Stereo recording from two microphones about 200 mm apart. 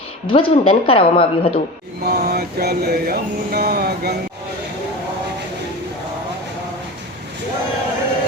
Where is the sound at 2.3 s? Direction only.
50° right (ahead or behind).